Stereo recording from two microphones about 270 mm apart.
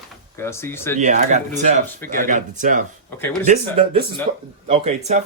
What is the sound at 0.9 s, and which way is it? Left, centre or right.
Speech, right.